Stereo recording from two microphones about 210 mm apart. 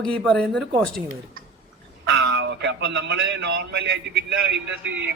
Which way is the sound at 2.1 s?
55° right (ahead or behind).